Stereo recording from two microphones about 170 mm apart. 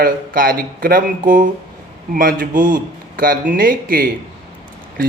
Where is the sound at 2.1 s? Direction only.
55° right (ahead or behind).